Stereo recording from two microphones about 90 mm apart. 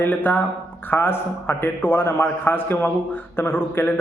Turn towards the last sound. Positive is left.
turn(degrees=25)  # may be behind; listen again after turning